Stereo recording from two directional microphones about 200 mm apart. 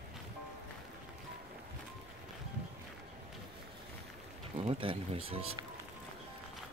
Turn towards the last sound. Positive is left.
turn(degrees=-30)  # may be behind; listen again after turning